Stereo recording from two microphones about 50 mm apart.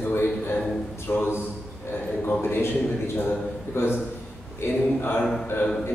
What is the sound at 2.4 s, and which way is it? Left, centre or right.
Speech, left.